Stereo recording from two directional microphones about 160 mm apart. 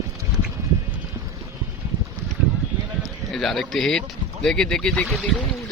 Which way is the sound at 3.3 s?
Centre (ahead or behind).